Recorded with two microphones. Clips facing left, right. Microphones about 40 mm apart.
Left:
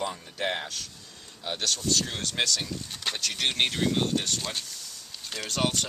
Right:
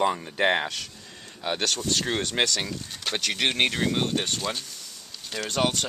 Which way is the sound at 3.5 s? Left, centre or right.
Centre.